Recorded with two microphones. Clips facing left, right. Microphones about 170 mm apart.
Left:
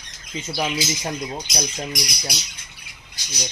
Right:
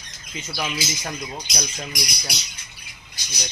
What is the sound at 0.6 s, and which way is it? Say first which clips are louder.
Speech: left 4 dB; 30° left (ahead or behind).